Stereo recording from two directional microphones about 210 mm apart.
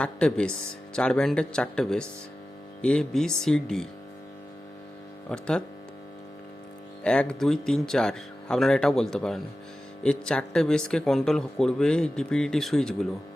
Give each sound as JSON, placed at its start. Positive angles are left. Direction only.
{"t": 0.0, "sound": "speech", "side_deg": 5}
{"t": 5.3, "sound": "speech", "side_deg": 5}
{"t": 7.0, "sound": "speech", "side_deg": 5}